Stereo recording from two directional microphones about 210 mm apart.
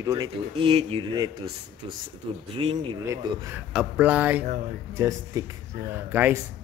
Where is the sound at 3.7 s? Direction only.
5° right (ahead or behind).